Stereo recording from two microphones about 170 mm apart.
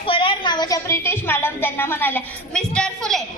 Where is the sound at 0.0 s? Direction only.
30° left (ahead or behind).